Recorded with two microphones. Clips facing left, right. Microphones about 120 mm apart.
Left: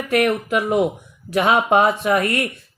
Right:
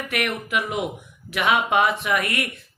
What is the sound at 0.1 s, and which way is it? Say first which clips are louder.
Speech: left 9 dB; 35° left (ahead or behind).